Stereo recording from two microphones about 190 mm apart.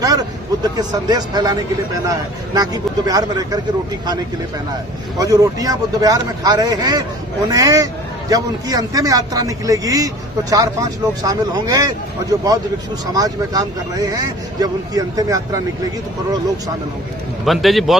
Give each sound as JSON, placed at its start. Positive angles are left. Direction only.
{"t": 0.0, "sound": "speech", "side_deg": -20}
{"t": 5.1, "sound": "speech", "side_deg": -20}
{"t": 17.4, "sound": "a man's voice", "side_deg": 0}